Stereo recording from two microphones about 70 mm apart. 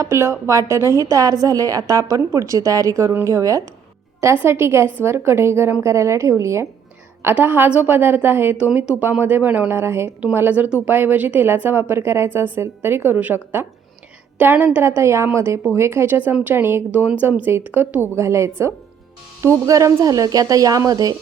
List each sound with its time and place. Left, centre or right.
0.0 s a woman's voice: right
1.1 s a woman's voice: right
4.2 s a woman's voice: right
7.3 s a woman's voice: right
8.6 s a woman's voice: right
9.7 s a woman's voice: right
14.8 s a woman's voice: right
18.2 s a woman's voice: right